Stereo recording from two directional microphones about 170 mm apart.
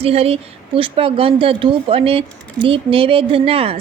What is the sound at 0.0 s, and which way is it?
A woman's voice, 35° right (ahead or behind).